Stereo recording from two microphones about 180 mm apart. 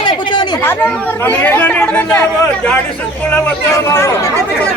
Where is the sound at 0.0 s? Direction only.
25° left (ahead or behind).